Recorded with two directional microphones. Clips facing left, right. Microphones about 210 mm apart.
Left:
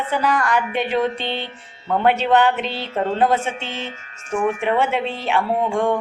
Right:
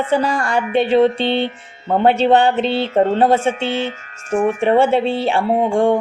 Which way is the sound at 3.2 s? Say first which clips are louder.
Right 5 dB; 30° right (ahead or behind).